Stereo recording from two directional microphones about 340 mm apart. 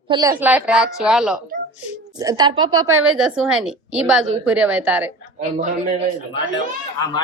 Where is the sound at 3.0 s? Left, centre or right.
Centre.